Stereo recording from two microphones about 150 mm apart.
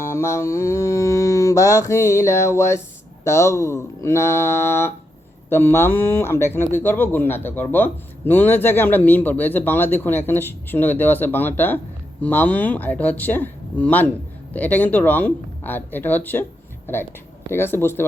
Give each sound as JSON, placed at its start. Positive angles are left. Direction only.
{"t": 0.0, "sound": "mantra", "side_deg": 20}
{"t": 3.2, "sound": "speech", "side_deg": 20}